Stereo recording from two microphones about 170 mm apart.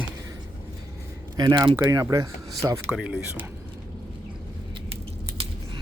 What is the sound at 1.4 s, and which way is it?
Speech, 25° right (ahead or behind).